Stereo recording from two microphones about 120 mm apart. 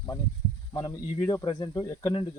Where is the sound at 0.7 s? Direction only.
30° left (ahead or behind).